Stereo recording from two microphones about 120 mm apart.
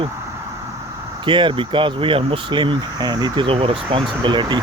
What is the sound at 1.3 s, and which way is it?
Speech, 40° right (ahead or behind).